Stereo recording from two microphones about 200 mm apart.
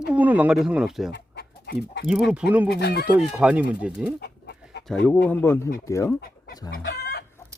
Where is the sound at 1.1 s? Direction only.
55° left (ahead or behind).